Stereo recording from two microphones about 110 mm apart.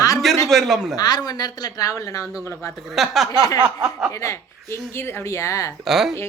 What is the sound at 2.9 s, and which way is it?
Speech, centre (ahead or behind).